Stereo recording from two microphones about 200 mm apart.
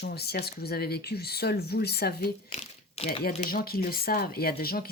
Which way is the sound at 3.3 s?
40° left (ahead or behind).